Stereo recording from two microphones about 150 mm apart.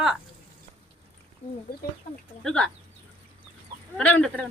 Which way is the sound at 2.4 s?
5° left (ahead or behind).